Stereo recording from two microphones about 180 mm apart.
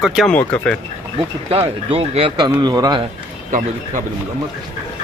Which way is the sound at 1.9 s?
30° right (ahead or behind).